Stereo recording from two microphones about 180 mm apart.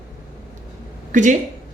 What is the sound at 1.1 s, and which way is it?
Speech, 45° right (ahead or behind).